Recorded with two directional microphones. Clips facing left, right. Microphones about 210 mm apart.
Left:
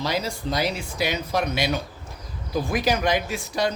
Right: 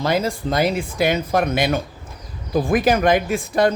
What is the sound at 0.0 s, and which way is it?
Speech, 50° right (ahead or behind).